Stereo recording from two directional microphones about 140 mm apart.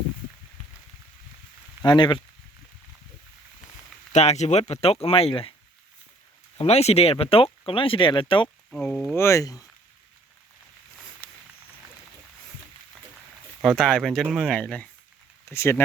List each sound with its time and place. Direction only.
1.8 s speech: 35° left (ahead or behind)
4.1 s speech: 55° left (ahead or behind)
6.6 s speech: 50° left (ahead or behind)
8.7 s speech: 5° left (ahead or behind)
9.1 s speech: 20° left (ahead or behind)
11.2 s a sound: 15° left (ahead or behind)
13.6 s speech: 5° left (ahead or behind)
15.4 s speech: 20° left (ahead or behind)